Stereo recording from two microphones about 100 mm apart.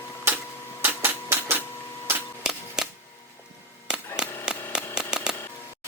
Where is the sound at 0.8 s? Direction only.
20° right (ahead or behind).